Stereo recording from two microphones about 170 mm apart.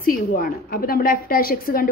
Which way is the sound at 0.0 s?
55° left (ahead or behind).